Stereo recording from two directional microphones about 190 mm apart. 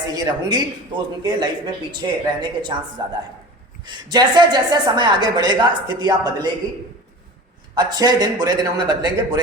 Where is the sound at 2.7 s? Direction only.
20° right (ahead or behind).